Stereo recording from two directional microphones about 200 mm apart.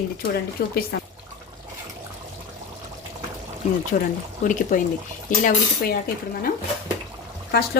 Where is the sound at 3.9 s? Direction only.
40° left (ahead or behind).